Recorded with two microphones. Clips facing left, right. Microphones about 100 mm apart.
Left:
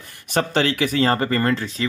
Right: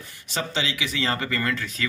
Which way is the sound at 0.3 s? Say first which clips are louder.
Left 8 dB; 55° left (ahead or behind).